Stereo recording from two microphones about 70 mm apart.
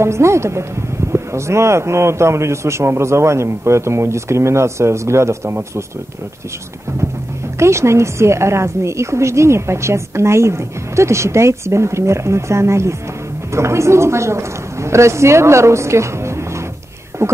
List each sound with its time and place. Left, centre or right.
0.0 s a man's voice: right
7.5 s a woman's voice: right